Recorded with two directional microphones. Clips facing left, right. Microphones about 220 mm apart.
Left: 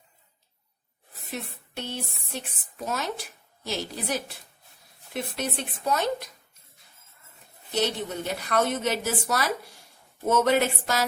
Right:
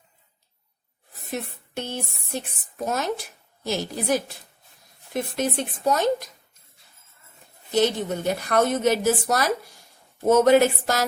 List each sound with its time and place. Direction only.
1.3 s a woman's voice: 45° right (ahead or behind)
7.8 s a woman's voice: 45° right (ahead or behind)